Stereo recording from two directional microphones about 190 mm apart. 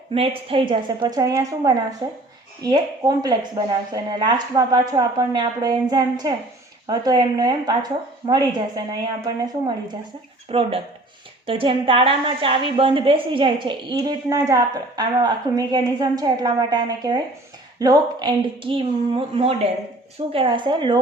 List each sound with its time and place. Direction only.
0.1 s a woman's voice: 30° right (ahead or behind)